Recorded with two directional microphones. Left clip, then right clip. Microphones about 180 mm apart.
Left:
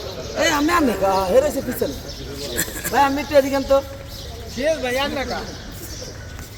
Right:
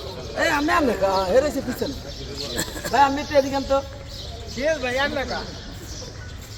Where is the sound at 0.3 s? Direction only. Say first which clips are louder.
Left 2 dB; 35° left (ahead or behind).